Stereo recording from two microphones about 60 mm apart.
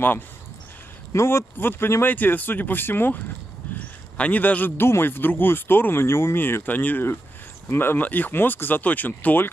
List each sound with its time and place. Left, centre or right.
1.1 s a man's voice: left